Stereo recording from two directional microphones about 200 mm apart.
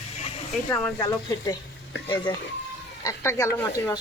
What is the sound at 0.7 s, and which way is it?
Speech, 15° left (ahead or behind).